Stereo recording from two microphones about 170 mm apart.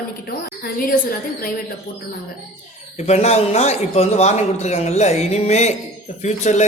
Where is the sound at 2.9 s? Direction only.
40° left (ahead or behind).